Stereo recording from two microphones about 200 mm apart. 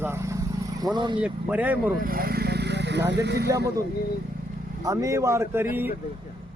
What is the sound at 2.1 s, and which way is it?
Vehicle, 50° right (ahead or behind).